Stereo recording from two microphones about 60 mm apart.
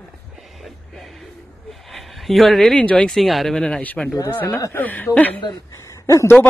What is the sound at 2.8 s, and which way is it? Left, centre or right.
Speech, centre.